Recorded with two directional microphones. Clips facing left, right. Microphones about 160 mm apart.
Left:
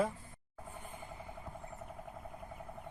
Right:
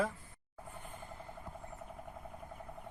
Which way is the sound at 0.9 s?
15° left (ahead or behind).